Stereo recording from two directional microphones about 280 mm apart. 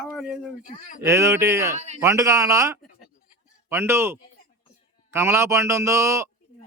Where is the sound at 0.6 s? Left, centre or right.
Left.